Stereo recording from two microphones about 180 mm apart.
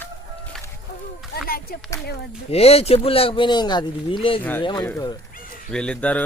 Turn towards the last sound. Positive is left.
turn(degrees=5)  # may be behind; listen again after turning